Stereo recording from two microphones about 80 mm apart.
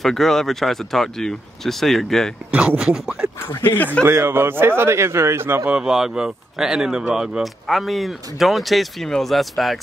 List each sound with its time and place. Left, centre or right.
0.0 s speech: centre
2.5 s speech: centre
3.4 s speech: left
4.0 s a man's voice: right
5.7 s speech: centre